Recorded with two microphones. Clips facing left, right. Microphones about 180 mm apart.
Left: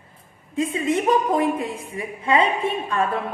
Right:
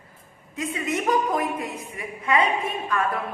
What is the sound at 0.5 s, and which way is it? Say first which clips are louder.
A woman's voice: left 5 dB; 30° left (ahead or behind).